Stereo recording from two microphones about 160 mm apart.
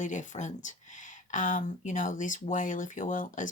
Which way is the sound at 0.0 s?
50° left (ahead or behind).